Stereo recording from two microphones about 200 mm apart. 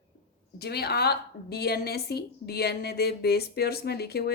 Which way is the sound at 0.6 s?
50° left (ahead or behind).